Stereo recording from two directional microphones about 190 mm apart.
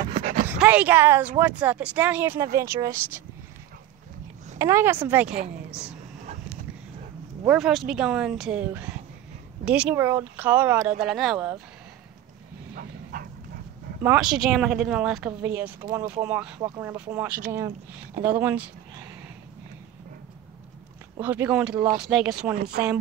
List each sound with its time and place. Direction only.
0.0 s dog: 30° right (ahead or behind)
0.5 s speech: 10° right (ahead or behind)
4.6 s speech: 15° right (ahead or behind)
7.4 s speech: 5° right (ahead or behind)
12.7 s bow-wow: 50° right (ahead or behind)
14.0 s speech: 5° right (ahead or behind)
15.8 s speech: 20° right (ahead or behind)
21.2 s speech: 10° right (ahead or behind)
22.6 s speech: 55° right (ahead or behind)